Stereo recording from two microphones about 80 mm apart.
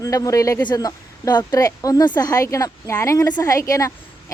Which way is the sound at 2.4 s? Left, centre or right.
Left.